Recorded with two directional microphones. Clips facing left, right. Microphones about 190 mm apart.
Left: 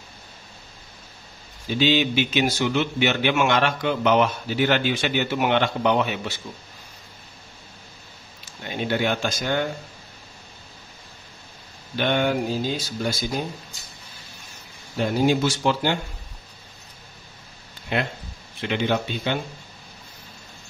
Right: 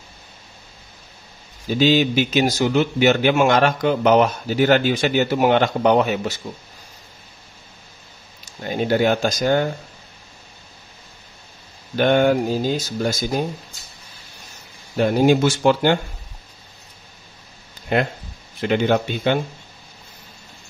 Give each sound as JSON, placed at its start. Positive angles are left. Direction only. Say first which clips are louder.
{"t": 1.7, "sound": "a man's voice", "louder": "right 4 dB", "side_deg": -40}
{"t": 8.5, "sound": "a man's voice", "louder": "right 6 dB", "side_deg": -40}
{"t": 12.0, "sound": "speech", "louder": "right 6 dB", "side_deg": -45}
{"t": 15.0, "sound": "speech", "louder": "right 5 dB", "side_deg": -55}
{"t": 17.9, "sound": "speech", "louder": "right 5 dB", "side_deg": -45}